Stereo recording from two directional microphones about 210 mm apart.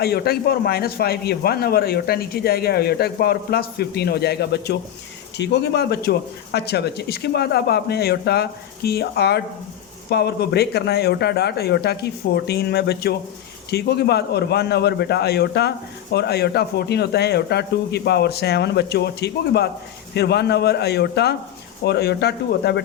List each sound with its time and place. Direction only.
0.0 s a man's voice: 50° left (ahead or behind)